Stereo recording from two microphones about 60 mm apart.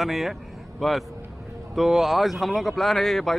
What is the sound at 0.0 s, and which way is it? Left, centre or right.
Speech, centre.